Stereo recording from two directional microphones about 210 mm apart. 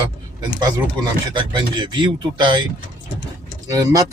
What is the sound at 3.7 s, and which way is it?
Speech, 15° right (ahead or behind).